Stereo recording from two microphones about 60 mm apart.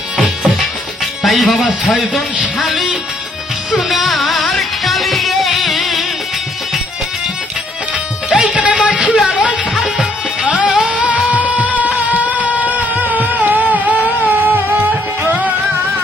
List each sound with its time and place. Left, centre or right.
1.2 s speech: centre
3.7 s music: centre
8.3 s music: centre
10.4 s music: centre
10.7 s music: centre
11.3 s music of bollywood: right
11.8 s music: right
12.2 s a sound: right